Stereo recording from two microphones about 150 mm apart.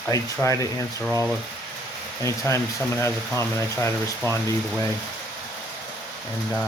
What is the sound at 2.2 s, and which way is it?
Speech, 20° left (ahead or behind).